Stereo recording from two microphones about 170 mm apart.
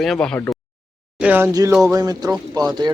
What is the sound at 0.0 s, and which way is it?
Speech, 5° left (ahead or behind).